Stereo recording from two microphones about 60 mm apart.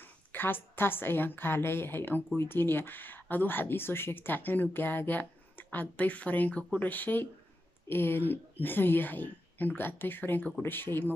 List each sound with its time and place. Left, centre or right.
0.0 s a woman's voice: left